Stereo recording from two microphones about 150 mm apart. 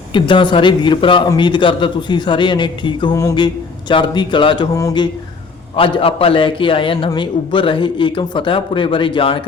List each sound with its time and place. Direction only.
0.1 s a man's voice: 35° left (ahead or behind)
5.7 s a man's voice: 35° left (ahead or behind)